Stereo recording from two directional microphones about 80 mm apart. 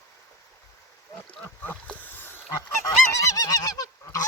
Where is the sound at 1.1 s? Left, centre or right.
Centre.